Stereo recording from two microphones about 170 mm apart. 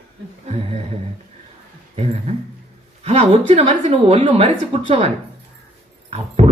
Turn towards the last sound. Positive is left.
turn(degrees=-40)  # may be behind; listen again after turning